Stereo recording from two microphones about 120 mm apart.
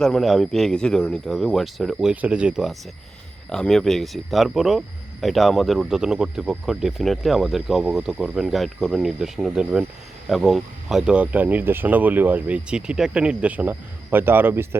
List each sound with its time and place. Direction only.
0.0 s speech: centre (ahead or behind); by 14.8 s 20° right (ahead or behind)